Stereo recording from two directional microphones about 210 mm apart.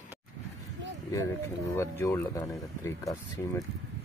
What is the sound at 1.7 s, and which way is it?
Speech, 10° left (ahead or behind).